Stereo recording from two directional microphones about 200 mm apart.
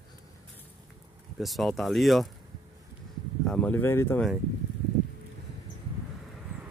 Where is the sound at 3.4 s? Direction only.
5° left (ahead or behind).